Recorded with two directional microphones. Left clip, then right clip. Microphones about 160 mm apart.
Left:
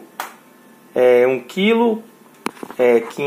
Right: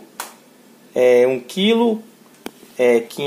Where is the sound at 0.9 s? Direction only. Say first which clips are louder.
Even; 10° right (ahead or behind).